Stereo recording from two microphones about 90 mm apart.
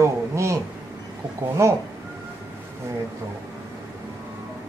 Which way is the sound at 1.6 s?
30° right (ahead or behind).